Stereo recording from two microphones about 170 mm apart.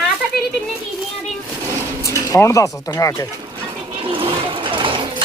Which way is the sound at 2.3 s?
20° left (ahead or behind).